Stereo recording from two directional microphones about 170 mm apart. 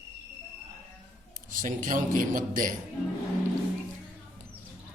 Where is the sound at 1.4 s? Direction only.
50° right (ahead or behind).